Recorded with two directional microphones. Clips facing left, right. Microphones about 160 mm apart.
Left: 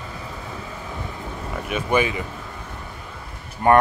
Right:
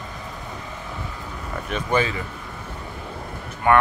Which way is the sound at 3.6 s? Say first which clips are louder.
Left 2 dB; 40° left (ahead or behind).